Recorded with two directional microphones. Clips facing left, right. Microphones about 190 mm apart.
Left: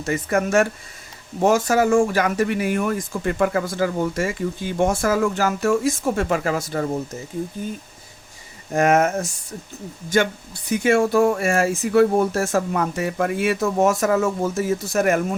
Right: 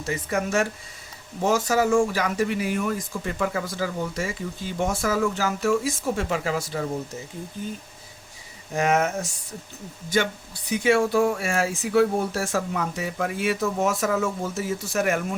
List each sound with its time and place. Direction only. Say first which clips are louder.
0.0 s speech: left 5 dB; 55° left (ahead or behind)
8.7 s speech: left 5 dB; 50° left (ahead or behind)
10.7 s speech: left 3 dB; 50° left (ahead or behind)